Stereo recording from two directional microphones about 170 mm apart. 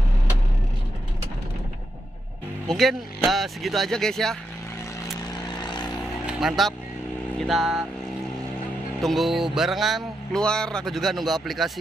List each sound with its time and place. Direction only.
2.7 s speech: centre (ahead or behind)
5.5 s vehicle: 25° left (ahead or behind)
6.2 s vehicle: centre (ahead or behind)
7.3 s speech: centre (ahead or behind)
9.0 s speech: centre (ahead or behind)